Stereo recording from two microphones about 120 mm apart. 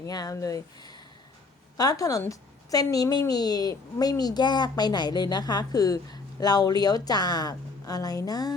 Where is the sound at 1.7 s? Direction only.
30° left (ahead or behind).